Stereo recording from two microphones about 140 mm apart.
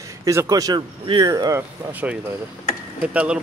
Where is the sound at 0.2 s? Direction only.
25° right (ahead or behind).